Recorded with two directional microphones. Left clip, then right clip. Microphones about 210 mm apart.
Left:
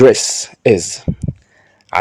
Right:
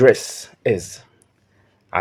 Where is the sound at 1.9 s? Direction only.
45° left (ahead or behind).